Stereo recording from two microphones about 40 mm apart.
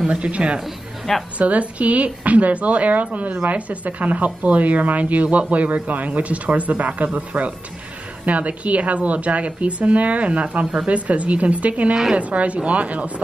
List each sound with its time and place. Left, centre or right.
0.1 s a woman's voice: right
1.1 s a woman's voice: centre
1.4 s a woman's voice: right
11.9 s a woman's voice: centre
12.2 s a woman's voice: right